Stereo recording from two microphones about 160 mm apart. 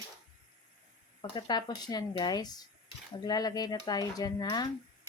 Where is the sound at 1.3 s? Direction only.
25° left (ahead or behind).